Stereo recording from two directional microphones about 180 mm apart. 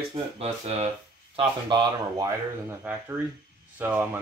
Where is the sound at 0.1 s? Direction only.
35° right (ahead or behind).